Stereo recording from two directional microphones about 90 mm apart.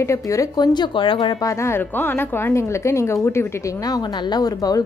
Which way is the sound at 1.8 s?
20° left (ahead or behind).